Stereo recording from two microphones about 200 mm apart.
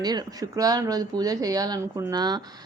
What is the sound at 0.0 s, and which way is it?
Speech, 20° right (ahead or behind).